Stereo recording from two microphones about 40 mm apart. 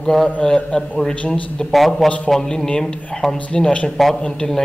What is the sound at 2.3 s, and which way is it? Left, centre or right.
A man's voice, centre.